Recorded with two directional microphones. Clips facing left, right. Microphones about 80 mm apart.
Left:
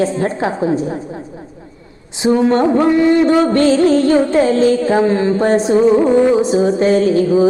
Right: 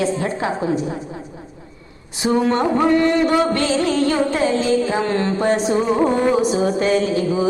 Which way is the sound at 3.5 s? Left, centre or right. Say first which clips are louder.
Left 7 dB; left.